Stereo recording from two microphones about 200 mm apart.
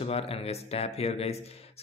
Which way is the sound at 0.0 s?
30° left (ahead or behind).